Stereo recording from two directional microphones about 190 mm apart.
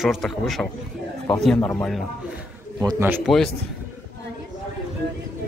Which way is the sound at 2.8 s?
15° right (ahead or behind).